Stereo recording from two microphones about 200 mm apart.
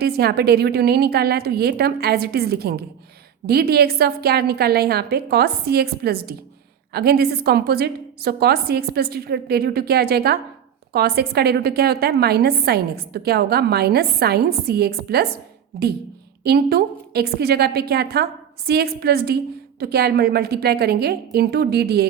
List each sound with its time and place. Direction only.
0.0 s a woman's voice: 55° right (ahead or behind)
16.4 s a woman's voice: 55° right (ahead or behind)